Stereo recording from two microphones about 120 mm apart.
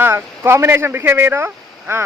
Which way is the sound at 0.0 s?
20° right (ahead or behind).